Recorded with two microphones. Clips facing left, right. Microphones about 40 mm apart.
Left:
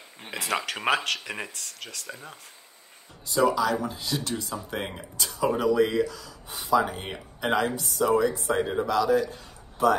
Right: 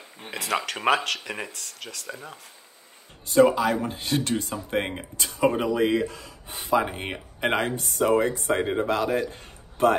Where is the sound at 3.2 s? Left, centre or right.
Right.